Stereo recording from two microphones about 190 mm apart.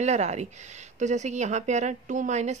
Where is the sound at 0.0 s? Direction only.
35° right (ahead or behind).